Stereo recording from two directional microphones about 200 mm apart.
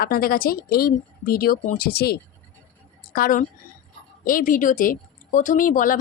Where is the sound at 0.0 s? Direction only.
50° left (ahead or behind).